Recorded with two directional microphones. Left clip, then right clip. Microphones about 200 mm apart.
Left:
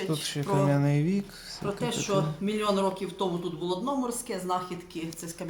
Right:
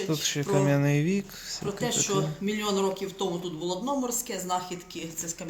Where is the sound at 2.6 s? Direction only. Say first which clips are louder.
Left 1 dB; 45° left (ahead or behind).